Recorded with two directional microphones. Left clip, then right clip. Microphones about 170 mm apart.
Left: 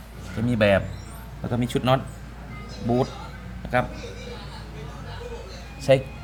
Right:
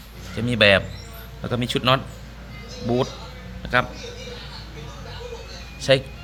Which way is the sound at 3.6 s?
Centre (ahead or behind).